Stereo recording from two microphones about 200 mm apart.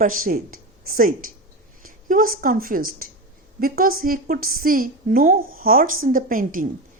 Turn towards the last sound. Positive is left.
turn(degrees=-45)  # may be behind; listen again after turning